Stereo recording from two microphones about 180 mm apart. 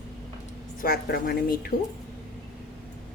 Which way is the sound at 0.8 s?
55° left (ahead or behind).